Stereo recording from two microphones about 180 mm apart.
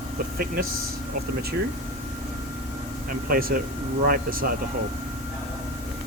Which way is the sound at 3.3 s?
55° right (ahead or behind).